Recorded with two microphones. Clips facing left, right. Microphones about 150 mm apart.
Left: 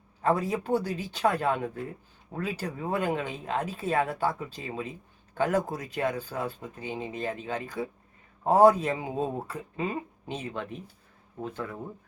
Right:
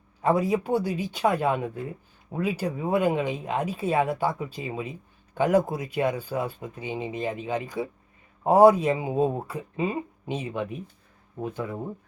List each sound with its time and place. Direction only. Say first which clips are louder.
0.2 s speech: right 4 dB; 10° right (ahead or behind)